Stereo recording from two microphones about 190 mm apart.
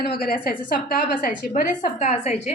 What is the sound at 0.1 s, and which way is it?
A woman's voice, 55° left (ahead or behind).